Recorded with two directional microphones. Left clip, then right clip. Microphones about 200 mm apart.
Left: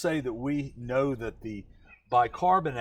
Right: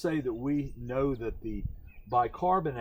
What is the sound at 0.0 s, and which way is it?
Speech, 25° left (ahead or behind).